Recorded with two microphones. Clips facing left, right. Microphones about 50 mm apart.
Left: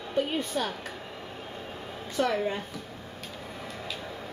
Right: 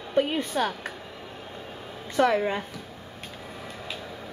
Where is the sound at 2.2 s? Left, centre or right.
Right.